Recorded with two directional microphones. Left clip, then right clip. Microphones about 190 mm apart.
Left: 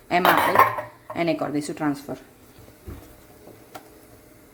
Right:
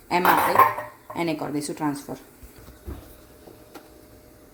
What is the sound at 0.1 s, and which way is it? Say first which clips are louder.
Speech: left 1 dB; 15° left (ahead or behind).